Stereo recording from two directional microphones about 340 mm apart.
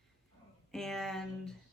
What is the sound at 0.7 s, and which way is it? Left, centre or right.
Speech, centre.